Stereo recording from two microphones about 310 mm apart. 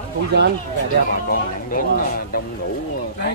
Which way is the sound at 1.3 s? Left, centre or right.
Left.